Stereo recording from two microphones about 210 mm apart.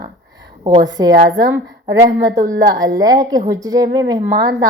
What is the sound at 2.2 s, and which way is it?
A woman's voice, 15° right (ahead or behind).